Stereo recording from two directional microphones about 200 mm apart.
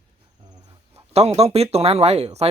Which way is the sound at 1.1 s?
30° right (ahead or behind).